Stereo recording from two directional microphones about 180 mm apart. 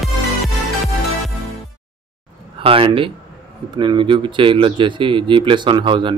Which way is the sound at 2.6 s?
30° right (ahead or behind).